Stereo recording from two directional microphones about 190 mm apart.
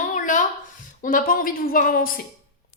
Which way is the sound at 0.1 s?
45° left (ahead or behind).